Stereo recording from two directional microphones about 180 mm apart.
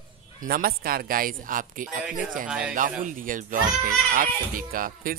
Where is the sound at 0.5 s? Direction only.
55° right (ahead or behind).